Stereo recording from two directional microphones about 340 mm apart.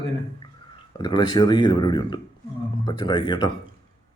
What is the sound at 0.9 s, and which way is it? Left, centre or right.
Speech, centre.